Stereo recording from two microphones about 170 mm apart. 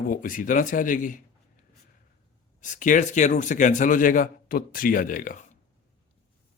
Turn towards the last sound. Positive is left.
turn(degrees=50)  # may be behind; listen again after turning